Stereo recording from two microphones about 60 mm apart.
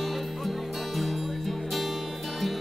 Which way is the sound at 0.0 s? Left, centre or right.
Centre.